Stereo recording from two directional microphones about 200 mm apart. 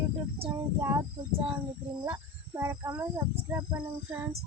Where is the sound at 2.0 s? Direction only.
15° right (ahead or behind).